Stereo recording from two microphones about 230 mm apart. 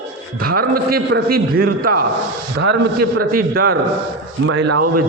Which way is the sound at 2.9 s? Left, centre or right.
Right.